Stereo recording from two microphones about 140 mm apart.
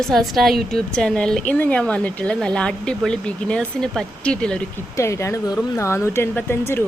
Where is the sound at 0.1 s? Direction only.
Centre (ahead or behind).